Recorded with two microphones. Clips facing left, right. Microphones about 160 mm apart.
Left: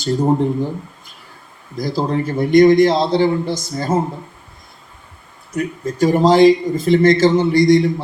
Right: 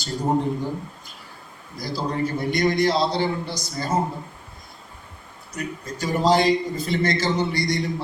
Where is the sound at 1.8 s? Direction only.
50° left (ahead or behind).